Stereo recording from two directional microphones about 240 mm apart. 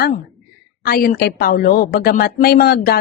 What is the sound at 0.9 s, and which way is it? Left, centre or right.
A woman's voice, left.